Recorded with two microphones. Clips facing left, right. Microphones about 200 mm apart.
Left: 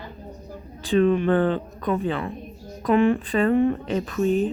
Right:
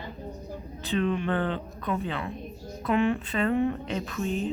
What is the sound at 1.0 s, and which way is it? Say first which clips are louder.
A woman's voice: left 8 dB; 45° left (ahead or behind).